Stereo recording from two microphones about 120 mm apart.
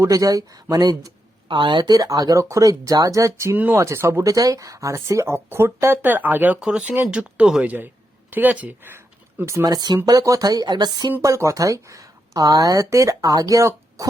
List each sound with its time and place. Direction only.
0.0 s speech: 30° right (ahead or behind)
9.6 s speech: 35° right (ahead or behind)
11.2 s speech: 25° right (ahead or behind)